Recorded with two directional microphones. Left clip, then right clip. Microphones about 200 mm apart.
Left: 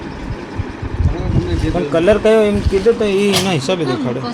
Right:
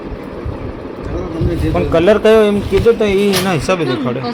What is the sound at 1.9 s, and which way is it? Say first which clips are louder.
Speech: right 2 dB; 15° right (ahead or behind).